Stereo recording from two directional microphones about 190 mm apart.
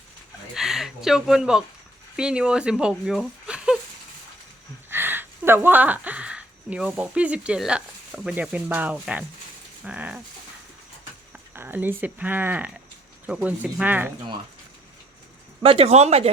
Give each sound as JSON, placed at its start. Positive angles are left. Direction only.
{"t": 0.5, "sound": "speech", "side_deg": 0}
{"t": 4.9, "sound": "speech", "side_deg": -10}
{"t": 9.8, "sound": "dog", "side_deg": -5}
{"t": 11.5, "sound": "speech", "side_deg": -10}
{"t": 15.6, "sound": "speech", "side_deg": -30}